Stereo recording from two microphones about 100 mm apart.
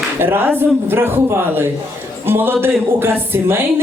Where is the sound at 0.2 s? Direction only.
20° right (ahead or behind).